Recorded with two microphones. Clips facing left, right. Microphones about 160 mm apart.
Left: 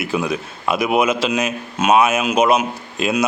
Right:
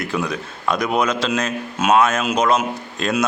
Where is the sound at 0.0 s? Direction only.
5° left (ahead or behind).